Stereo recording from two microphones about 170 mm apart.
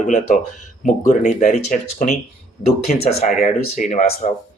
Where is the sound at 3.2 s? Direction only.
45° left (ahead or behind).